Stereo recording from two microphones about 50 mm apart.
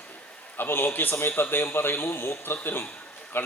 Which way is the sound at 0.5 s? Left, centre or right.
Left.